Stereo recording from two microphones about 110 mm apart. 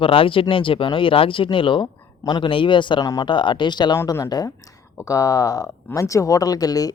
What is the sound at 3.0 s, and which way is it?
Speech, 35° left (ahead or behind).